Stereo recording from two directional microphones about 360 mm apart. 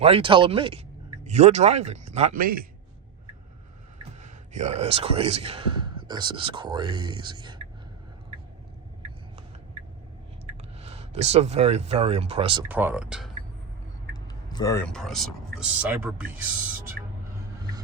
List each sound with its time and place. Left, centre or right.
0.0 s a man's voice: centre
4.2 s a man's voice: centre
10.8 s a man's voice: centre
14.3 s speech: centre